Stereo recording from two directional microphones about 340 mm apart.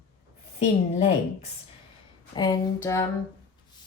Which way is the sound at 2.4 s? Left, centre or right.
Centre.